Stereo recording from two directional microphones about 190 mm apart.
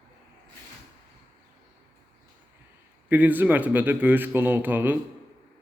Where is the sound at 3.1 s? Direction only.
10° right (ahead or behind).